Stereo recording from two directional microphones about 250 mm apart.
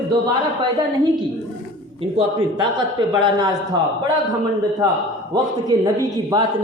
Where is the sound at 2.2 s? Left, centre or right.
Centre.